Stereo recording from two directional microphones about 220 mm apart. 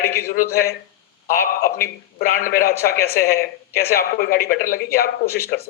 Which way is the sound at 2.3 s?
40° left (ahead or behind).